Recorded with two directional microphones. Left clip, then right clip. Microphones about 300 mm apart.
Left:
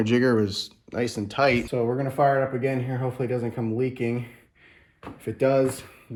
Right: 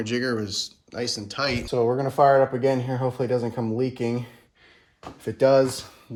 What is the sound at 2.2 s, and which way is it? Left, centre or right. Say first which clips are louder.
Speech: right 4 dB; right.